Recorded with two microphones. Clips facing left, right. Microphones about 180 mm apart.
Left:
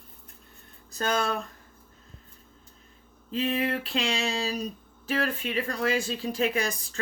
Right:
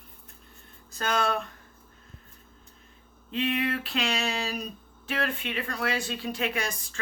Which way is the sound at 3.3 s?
35° left (ahead or behind).